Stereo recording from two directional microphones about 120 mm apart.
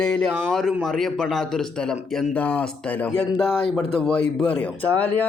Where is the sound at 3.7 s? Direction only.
5° left (ahead or behind).